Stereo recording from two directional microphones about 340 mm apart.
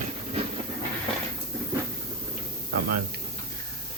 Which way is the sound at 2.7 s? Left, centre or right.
Right.